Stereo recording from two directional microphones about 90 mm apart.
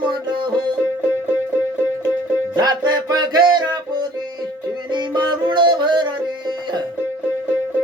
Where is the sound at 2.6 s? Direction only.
50° right (ahead or behind).